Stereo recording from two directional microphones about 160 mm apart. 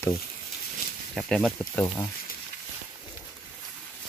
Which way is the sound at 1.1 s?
5° left (ahead or behind).